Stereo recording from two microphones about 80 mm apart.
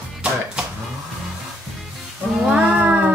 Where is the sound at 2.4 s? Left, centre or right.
Centre.